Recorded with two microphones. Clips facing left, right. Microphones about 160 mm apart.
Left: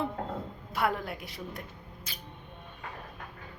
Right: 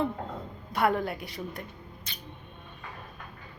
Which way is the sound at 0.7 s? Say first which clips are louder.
Right 4 dB; centre (ahead or behind).